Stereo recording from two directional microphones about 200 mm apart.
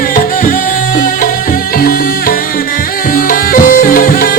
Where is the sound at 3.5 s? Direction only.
45° left (ahead or behind).